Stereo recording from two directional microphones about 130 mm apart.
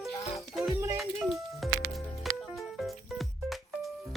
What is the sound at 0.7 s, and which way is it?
Music, 25° right (ahead or behind).